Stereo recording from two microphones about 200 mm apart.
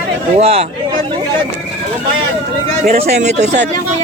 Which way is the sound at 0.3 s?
30° right (ahead or behind).